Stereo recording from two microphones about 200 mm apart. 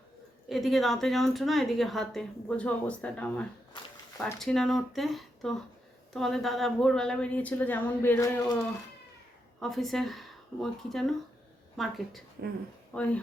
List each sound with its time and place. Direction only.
0.4 s a woman's voice: centre (ahead or behind)
3.7 s a sound: 25° left (ahead or behind)
4.2 s a woman's voice: 5° left (ahead or behind)
9.6 s a woman's voice: centre (ahead or behind)